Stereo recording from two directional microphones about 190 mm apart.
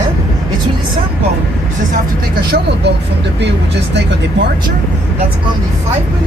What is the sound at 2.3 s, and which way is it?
Speech, 55° right (ahead or behind).